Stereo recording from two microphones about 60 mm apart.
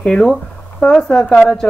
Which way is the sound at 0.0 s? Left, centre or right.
Centre.